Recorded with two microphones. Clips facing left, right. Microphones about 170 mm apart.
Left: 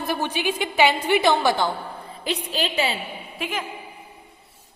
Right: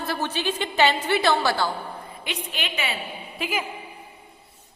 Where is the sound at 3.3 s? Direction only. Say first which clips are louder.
Right 1 dB; centre (ahead or behind).